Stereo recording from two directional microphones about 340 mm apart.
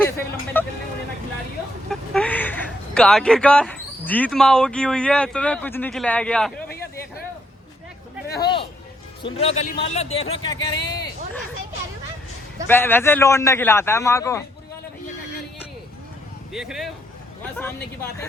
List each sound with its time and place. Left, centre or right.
0.6 s vehicle: centre
1.9 s speech: centre
6.7 s a sound: left
8.4 s a sound: centre
9.2 s a man's voice: centre
12.6 s a man's voice: centre
16.5 s a man's voice: centre